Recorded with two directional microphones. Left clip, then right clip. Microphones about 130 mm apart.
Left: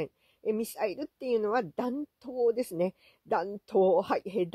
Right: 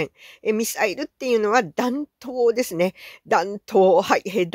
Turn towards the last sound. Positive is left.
turn(degrees=-15)  # may be behind; listen again after turning